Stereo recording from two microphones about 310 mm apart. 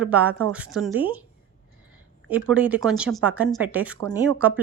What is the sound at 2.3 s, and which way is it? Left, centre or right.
Speech, centre.